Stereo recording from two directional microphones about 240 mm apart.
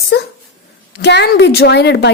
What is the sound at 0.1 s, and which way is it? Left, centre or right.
A woman's voice, left.